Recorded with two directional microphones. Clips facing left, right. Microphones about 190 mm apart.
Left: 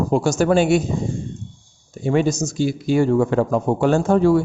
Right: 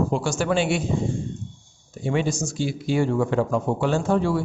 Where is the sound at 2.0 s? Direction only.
45° left (ahead or behind).